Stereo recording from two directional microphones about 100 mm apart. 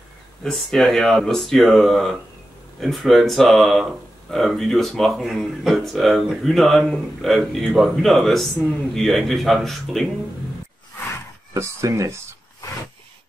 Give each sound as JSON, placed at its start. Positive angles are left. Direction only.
{"t": 0.4, "sound": "speech", "side_deg": 5}
{"t": 11.5, "sound": "speech", "side_deg": -30}